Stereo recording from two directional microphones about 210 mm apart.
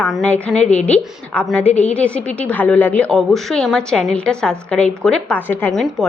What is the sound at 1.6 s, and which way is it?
Speech, 30° left (ahead or behind).